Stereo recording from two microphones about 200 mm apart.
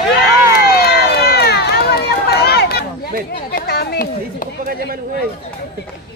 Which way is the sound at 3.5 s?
50° left (ahead or behind).